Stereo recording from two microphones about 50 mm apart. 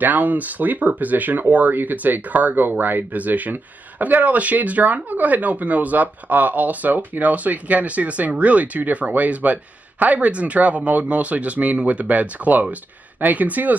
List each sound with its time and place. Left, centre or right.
0.0 s speech: right